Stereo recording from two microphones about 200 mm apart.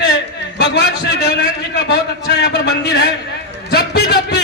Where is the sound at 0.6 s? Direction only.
55° left (ahead or behind).